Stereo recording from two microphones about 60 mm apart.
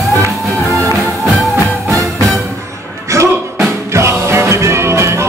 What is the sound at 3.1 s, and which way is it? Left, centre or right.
Music, right.